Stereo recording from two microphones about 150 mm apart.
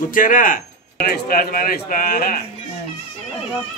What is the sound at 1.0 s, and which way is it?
Speech, 85° left.